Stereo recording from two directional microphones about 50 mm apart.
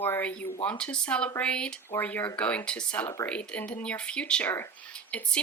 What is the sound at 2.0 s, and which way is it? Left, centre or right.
Speech, left.